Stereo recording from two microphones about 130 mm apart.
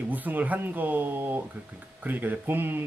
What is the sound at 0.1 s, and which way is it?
Speech, 15° right (ahead or behind).